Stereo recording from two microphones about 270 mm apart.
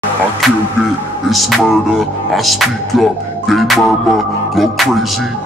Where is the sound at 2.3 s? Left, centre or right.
Centre.